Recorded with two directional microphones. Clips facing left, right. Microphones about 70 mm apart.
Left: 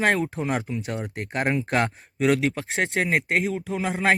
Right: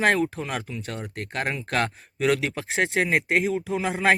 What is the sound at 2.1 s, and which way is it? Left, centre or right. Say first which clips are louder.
Speech: left 2 dB; centre.